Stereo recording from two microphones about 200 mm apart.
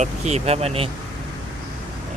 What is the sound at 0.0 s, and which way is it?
Speech, 35° right (ahead or behind).